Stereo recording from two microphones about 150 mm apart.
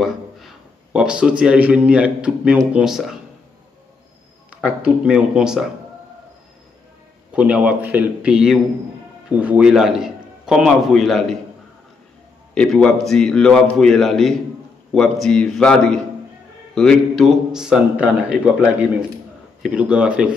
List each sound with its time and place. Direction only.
0.0 s a man's voice: centre (ahead or behind)
4.6 s a man's voice: 5° right (ahead or behind)
7.3 s a man's voice: 10° right (ahead or behind)
12.5 s a man's voice: 5° left (ahead or behind)